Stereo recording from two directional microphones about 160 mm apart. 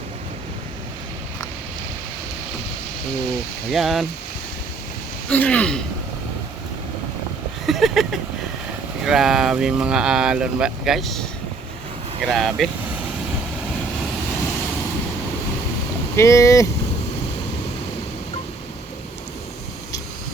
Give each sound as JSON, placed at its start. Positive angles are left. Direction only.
{"t": 3.7, "sound": "speech", "side_deg": 0}
{"t": 5.3, "sound": "speech", "side_deg": 10}
{"t": 7.7, "sound": "speech", "side_deg": 0}
{"t": 16.1, "sound": "speech", "side_deg": 20}